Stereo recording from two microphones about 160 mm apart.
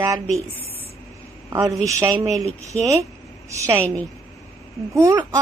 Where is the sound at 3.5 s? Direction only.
20° right (ahead or behind).